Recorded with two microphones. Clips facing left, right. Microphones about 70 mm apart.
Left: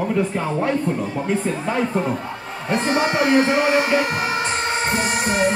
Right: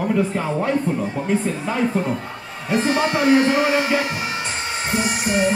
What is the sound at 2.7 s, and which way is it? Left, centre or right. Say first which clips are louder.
Speech: even; left.